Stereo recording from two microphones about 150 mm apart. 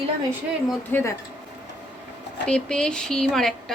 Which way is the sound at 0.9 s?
15° left (ahead or behind).